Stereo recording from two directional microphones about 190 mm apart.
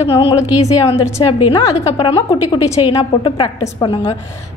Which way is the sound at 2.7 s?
25° left (ahead or behind).